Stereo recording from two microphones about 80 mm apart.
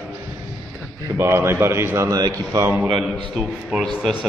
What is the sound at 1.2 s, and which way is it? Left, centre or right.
Speech, right.